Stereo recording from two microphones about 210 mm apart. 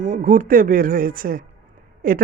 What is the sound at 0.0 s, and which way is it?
Speech, 35° right (ahead or behind).